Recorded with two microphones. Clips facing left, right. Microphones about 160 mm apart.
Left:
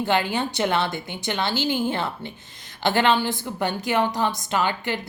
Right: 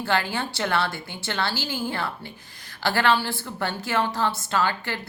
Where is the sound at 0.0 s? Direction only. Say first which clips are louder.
Left 3 dB; 20° left (ahead or behind).